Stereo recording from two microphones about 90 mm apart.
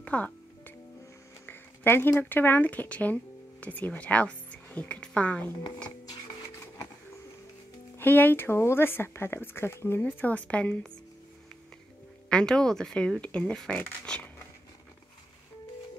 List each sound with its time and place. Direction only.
0.0 s music: 15° left (ahead or behind)
1.4 s a woman's voice: 25° left (ahead or behind)
8.0 s speech: 20° left (ahead or behind)
12.3 s speech: 10° left (ahead or behind)
14.0 s a sound: 10° left (ahead or behind)